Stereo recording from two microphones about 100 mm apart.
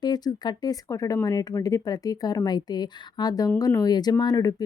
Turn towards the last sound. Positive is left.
turn(degrees=40)  # may be behind; listen again after turning